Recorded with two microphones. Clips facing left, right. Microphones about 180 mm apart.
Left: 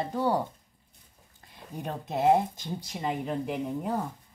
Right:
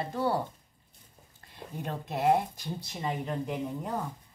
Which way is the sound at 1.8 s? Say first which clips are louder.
Left 3 dB; 15° left (ahead or behind).